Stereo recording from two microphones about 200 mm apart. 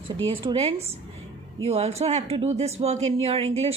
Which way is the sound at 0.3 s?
25° right (ahead or behind).